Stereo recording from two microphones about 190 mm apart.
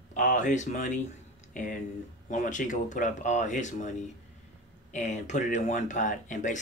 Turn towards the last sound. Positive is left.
turn(degrees=40)  # may be behind; listen again after turning